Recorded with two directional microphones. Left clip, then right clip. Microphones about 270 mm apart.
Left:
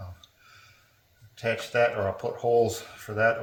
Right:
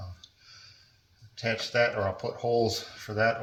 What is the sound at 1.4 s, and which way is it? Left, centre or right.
Speech, left.